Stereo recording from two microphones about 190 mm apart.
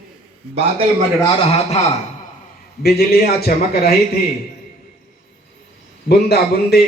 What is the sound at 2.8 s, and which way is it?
A man's voice, 55° left (ahead or behind).